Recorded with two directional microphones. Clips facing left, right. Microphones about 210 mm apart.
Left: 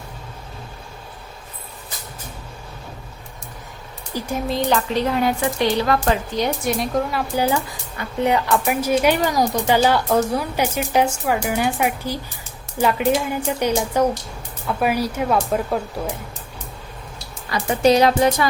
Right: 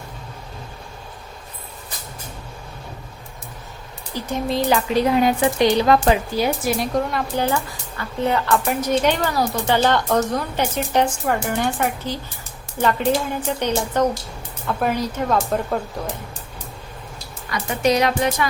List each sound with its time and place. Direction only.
4.1 s speech: 10° left (ahead or behind)
4.4 s speech: centre (ahead or behind)
4.9 s speech: 15° right (ahead or behind)
6.3 s speech: 5° right (ahead or behind)
17.5 s speech: 30° left (ahead or behind)